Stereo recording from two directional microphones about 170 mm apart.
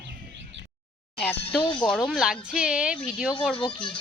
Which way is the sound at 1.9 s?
Centre (ahead or behind).